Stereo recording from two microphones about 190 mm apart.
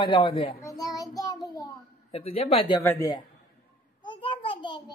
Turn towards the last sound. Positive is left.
turn(degrees=25)  # may be behind; listen again after turning